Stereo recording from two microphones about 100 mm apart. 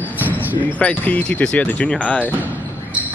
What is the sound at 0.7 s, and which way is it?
Speech, 15° left (ahead or behind).